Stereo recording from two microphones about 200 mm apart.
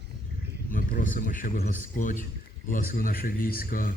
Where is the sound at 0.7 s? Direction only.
40° left (ahead or behind).